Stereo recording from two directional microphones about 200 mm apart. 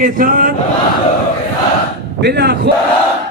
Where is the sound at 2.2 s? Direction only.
55° right (ahead or behind).